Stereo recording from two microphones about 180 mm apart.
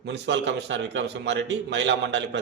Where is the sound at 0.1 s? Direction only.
75° right (ahead or behind).